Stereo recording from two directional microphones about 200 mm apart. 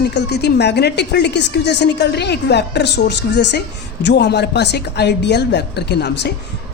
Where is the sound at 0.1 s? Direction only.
55° left (ahead or behind).